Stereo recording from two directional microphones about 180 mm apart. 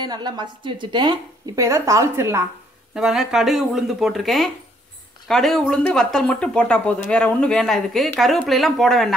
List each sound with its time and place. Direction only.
0.0 s a woman's voice: 25° right (ahead or behind)
2.9 s speech: 5° right (ahead or behind)